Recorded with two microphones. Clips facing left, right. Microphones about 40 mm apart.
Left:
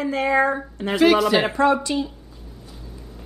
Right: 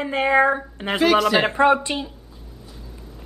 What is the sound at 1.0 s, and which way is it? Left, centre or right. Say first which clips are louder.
Speech: left 1 dB; centre.